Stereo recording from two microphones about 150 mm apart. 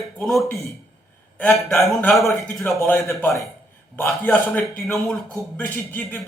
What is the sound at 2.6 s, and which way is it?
Speech, 15° left (ahead or behind).